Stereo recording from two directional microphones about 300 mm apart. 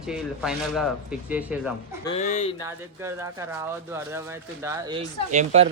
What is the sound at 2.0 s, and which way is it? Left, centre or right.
Speech, centre.